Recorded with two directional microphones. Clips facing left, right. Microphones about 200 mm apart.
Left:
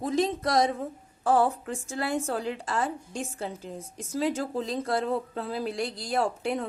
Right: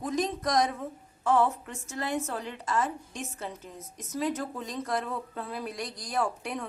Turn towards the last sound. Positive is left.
turn(degrees=25)  # may be behind; listen again after turning